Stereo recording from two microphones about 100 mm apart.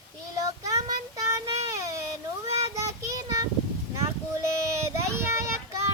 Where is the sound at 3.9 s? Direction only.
30° right (ahead or behind).